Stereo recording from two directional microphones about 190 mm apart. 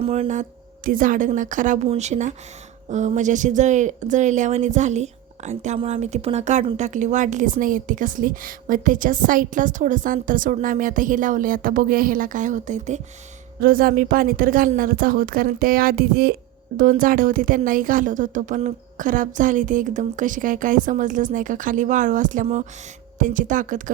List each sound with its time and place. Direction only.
0.0 s a woman's voice: 35° right (ahead or behind)